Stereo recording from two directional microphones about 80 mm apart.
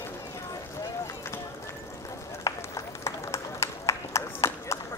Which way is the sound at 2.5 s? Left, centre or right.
Left.